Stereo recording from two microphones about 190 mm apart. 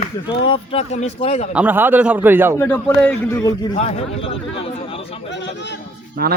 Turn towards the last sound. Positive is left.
turn(degrees=-50)  # may be behind; listen again after turning